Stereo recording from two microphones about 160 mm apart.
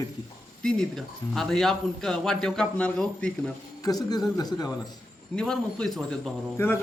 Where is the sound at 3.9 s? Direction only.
25° left (ahead or behind).